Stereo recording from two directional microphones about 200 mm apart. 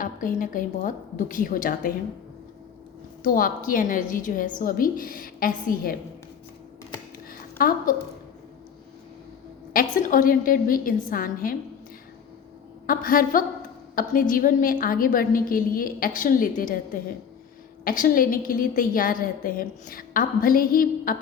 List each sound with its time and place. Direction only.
0.0 s a woman's voice: 40° left (ahead or behind)
3.2 s a woman's voice: 45° left (ahead or behind)
7.3 s a sound: 45° left (ahead or behind)
9.7 s a woman's voice: 45° left (ahead or behind)
12.9 s a woman's voice: 45° left (ahead or behind)